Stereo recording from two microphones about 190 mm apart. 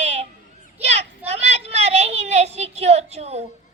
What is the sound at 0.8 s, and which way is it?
Children playing, 35° right (ahead or behind).